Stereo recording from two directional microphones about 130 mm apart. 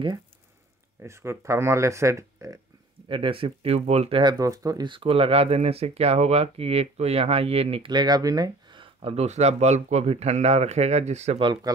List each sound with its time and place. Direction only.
1.0 s speech: 20° right (ahead or behind)
3.1 s speech: 40° right (ahead or behind)
4.2 s speech: 30° right (ahead or behind); by 7.9 s 50° right (ahead or behind)
7.9 s speech: 30° right (ahead or behind); by 11.3 s 60° right (ahead or behind)
11.7 s speech: 30° right (ahead or behind)